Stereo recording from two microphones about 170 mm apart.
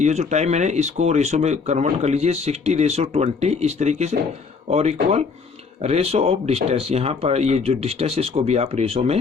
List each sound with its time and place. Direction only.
0.0 s speech: 40° right (ahead or behind)